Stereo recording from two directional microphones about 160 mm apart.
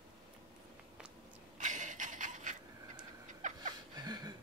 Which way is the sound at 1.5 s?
50° right (ahead or behind).